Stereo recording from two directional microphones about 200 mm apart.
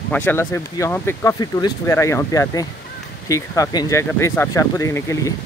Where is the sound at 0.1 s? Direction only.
10° left (ahead or behind).